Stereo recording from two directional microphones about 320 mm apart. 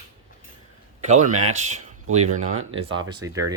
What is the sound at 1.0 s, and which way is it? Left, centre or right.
Speech, right.